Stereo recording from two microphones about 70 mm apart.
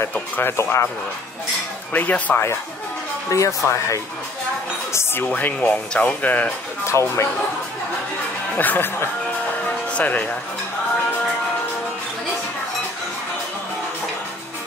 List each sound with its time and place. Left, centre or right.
0.4 s speech: left
2.0 s speech: left
3.3 s speech: left
5.2 s speech: left
6.9 s speech: left
8.5 s speech: left